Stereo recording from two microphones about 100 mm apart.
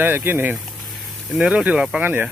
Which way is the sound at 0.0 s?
20° right (ahead or behind).